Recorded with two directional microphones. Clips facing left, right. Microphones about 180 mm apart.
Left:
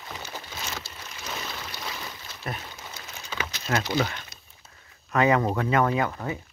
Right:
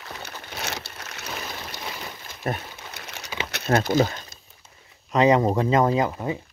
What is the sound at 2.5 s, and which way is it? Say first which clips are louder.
Speech: right 7 dB; 45° right (ahead or behind).